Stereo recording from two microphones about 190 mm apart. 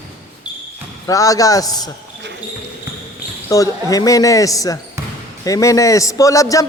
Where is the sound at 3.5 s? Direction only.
20° left (ahead or behind).